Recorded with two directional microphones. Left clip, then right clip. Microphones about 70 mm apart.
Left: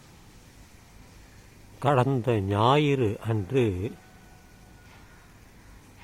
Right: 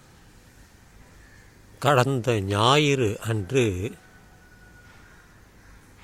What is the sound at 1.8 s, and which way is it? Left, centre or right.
A man's voice, right.